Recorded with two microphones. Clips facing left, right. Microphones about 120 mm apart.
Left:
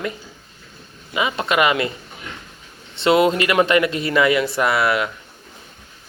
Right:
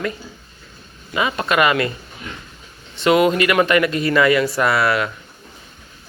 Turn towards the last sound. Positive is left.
turn(degrees=20)  # may be behind; listen again after turning